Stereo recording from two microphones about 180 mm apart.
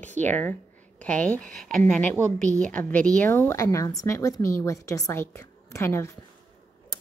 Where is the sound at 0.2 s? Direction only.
10° left (ahead or behind).